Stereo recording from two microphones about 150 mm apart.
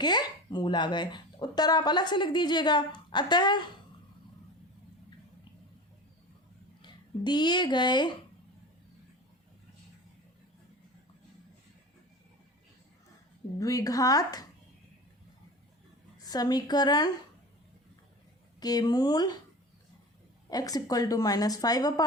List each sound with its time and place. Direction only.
0.0 s speech: 30° left (ahead or behind)
6.8 s speech: 30° left (ahead or behind)
13.6 s a woman's voice: 25° left (ahead or behind)
16.1 s a woman's voice: 25° left (ahead or behind)
18.6 s a woman's voice: 25° left (ahead or behind)
20.5 s a woman's voice: 25° left (ahead or behind)